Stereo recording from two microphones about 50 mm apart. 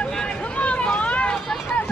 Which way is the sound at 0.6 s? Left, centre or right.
Left.